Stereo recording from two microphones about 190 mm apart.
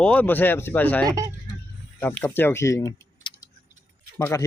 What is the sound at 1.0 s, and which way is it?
Speech, 15° right (ahead or behind).